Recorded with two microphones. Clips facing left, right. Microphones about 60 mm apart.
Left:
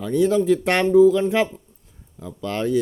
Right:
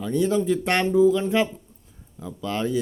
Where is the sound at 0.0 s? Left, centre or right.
Left.